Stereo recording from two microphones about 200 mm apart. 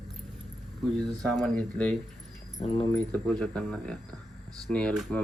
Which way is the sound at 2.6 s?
30° left (ahead or behind).